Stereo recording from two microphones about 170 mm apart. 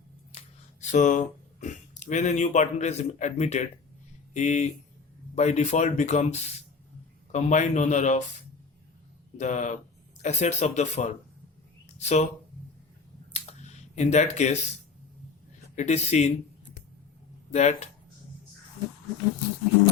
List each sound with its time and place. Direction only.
0.3 s speech: 40° left (ahead or behind)
9.4 s speech: 45° left (ahead or behind)
13.3 s a sound: 40° left (ahead or behind)
15.7 s speech: 40° left (ahead or behind)
17.5 s speech: 40° left (ahead or behind)